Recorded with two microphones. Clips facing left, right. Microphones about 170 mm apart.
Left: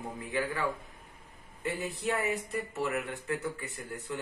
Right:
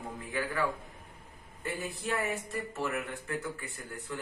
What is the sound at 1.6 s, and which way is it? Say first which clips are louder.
Speech: left 3 dB; 20° left (ahead or behind).